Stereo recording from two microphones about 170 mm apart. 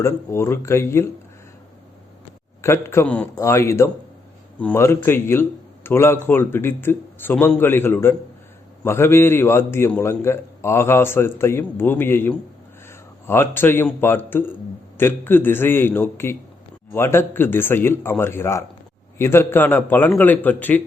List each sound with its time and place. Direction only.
0.0 s a man's voice: 15° left (ahead or behind)
2.6 s a man's voice: 15° left (ahead or behind)